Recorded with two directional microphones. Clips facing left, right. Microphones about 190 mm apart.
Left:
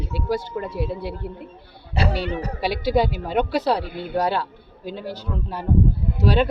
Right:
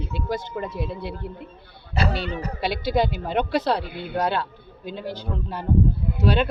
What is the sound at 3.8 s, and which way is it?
Speech, 45° left (ahead or behind).